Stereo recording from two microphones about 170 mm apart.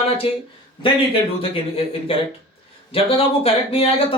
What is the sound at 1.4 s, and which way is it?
Speech, 35° left (ahead or behind).